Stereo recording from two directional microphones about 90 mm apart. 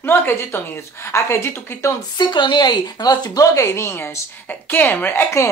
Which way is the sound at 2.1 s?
55° left (ahead or behind).